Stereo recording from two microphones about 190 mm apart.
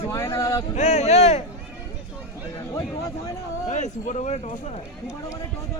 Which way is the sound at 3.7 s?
40° left (ahead or behind).